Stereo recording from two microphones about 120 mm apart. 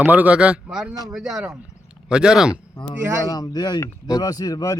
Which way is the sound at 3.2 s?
30° left (ahead or behind).